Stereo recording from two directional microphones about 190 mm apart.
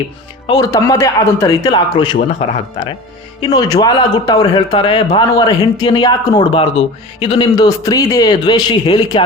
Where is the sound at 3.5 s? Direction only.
20° left (ahead or behind).